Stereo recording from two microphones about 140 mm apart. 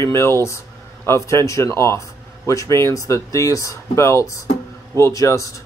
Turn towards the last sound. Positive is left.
turn(degrees=25)  # may be behind; listen again after turning